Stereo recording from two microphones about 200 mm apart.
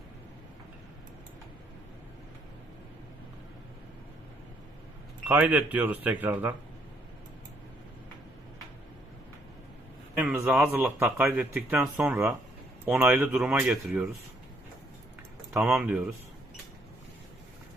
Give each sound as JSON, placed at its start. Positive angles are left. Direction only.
{"t": 5.2, "sound": "speech", "side_deg": -10}
{"t": 10.2, "sound": "speech", "side_deg": -5}
{"t": 15.5, "sound": "speech", "side_deg": -5}